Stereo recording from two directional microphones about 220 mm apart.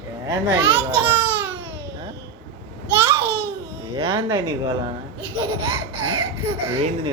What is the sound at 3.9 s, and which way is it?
Speech, 25° right (ahead or behind).